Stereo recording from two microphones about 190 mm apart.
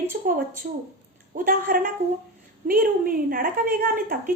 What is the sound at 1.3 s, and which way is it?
A woman's voice, 50° right (ahead or behind).